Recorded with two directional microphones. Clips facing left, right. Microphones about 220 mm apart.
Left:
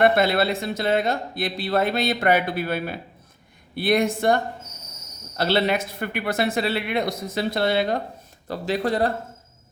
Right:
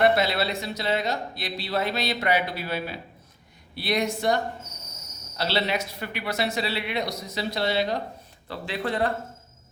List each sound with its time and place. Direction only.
0.0 s speech: 50° left (ahead or behind)
5.4 s speech: 50° left (ahead or behind)
8.4 s speech: 40° left (ahead or behind)